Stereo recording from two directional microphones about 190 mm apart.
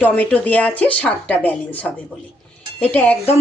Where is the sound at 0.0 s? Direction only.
10° left (ahead or behind).